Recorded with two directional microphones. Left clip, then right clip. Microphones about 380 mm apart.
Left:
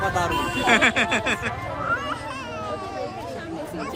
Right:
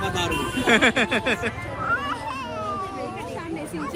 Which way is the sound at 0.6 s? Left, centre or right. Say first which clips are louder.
Even; centre.